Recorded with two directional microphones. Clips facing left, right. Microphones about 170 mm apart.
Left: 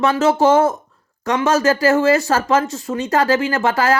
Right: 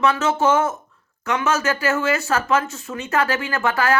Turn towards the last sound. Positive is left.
turn(degrees=30)  # may be behind; listen again after turning